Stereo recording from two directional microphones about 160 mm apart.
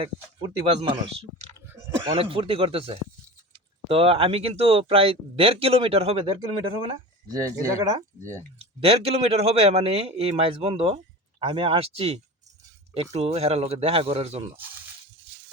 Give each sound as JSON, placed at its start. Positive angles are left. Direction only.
{"t": 0.0, "sound": "speech", "side_deg": -35}
{"t": 8.8, "sound": "speech", "side_deg": -40}